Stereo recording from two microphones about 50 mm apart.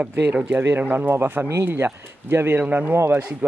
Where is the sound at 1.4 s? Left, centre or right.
Right.